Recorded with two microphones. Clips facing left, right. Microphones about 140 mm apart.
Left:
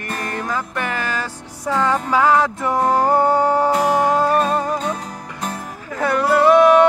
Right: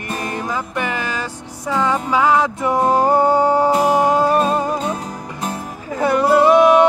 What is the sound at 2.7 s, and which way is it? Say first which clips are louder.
Music: right 1 dB; 20° right (ahead or behind).